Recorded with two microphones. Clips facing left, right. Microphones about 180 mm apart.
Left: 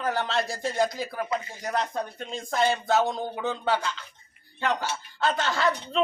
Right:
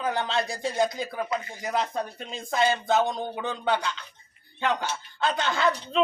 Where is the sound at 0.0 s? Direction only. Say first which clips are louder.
Even; centre (ahead or behind).